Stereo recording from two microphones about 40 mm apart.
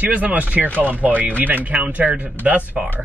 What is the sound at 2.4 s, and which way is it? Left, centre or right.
Speech, right.